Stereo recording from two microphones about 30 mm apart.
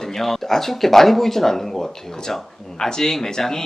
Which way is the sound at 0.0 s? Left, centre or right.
Centre.